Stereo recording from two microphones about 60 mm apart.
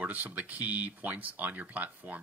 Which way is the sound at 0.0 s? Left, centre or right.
Right.